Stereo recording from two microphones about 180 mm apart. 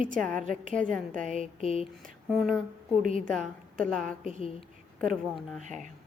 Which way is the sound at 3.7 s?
Centre (ahead or behind).